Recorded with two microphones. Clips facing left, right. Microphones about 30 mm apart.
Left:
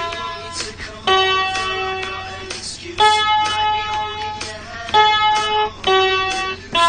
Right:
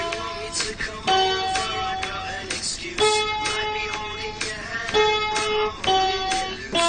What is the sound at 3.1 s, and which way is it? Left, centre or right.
Music, left.